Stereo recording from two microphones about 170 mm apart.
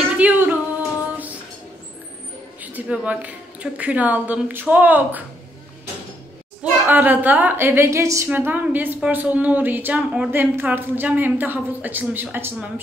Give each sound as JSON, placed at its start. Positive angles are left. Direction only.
{"t": 0.2, "sound": "singing", "side_deg": -10}
{"t": 2.6, "sound": "a woman's voice", "side_deg": -10}
{"t": 6.6, "sound": "a woman's voice", "side_deg": -10}